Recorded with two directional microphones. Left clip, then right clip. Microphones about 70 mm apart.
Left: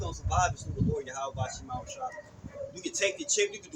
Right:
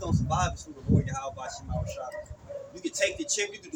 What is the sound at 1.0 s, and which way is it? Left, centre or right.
Speech, left.